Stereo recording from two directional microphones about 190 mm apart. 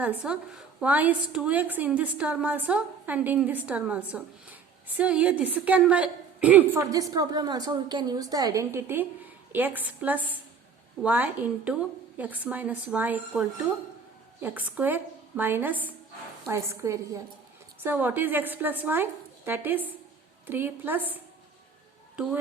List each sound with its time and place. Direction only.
0.0 s a woman's voice: 5° right (ahead or behind)
14.4 s a woman's voice: 10° right (ahead or behind)